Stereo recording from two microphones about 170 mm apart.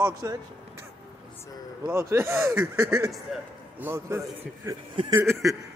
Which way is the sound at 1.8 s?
15° right (ahead or behind).